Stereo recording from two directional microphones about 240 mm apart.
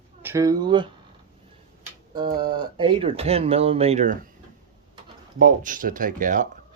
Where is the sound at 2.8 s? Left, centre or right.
Right.